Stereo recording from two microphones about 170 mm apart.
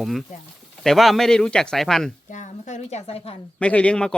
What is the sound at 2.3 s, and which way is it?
A woman's voice, 45° left (ahead or behind).